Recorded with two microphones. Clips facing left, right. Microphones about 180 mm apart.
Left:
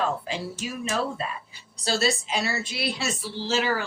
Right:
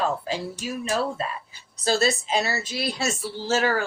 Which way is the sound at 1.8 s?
40° right (ahead or behind).